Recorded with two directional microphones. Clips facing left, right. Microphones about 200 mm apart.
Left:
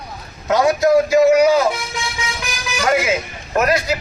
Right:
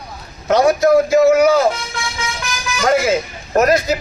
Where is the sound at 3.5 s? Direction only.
40° right (ahead or behind).